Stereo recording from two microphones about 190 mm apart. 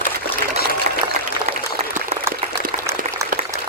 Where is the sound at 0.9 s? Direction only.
40° right (ahead or behind).